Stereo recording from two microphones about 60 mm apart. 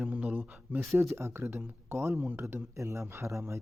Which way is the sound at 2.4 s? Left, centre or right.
Right.